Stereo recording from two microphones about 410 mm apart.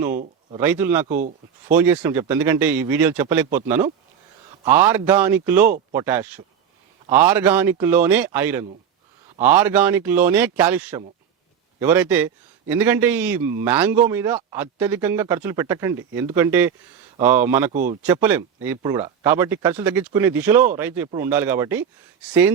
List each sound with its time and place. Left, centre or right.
0.6 s a man's voice: centre
1.1 s speech: centre
1.7 s a man's voice: centre
17.7 s speech: centre
18.0 s a man's voice: centre